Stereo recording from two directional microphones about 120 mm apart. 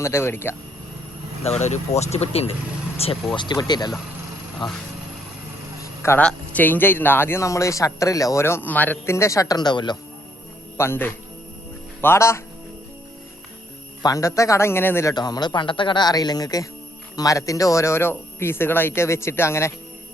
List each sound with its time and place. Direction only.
0.0 s speech: 20° left (ahead or behind)
1.5 s speech: 65° left (ahead or behind)
3.3 s speech: 40° left (ahead or behind)
5.8 s a sound: 20° left (ahead or behind)
6.2 s speech: 15° left (ahead or behind); by 10.0 s 40° left (ahead or behind)
10.8 s speech: 20° left (ahead or behind)
14.0 s speech: 30° left (ahead or behind)
15.1 s speech: 35° left (ahead or behind)